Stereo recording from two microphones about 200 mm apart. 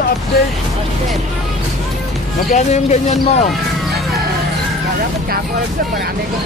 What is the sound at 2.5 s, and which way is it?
Speech, 35° left (ahead or behind).